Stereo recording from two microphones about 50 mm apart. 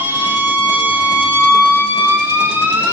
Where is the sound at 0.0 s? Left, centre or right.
Right.